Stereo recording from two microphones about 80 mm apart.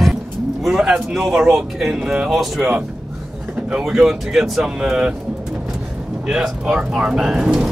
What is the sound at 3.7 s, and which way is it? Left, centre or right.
Speech, centre.